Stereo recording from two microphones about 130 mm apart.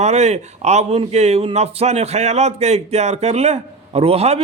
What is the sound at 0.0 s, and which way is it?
A man's voice, 60° right (ahead or behind).